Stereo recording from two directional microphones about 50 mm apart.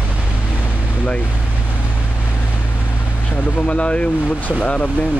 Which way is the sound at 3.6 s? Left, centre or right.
Left.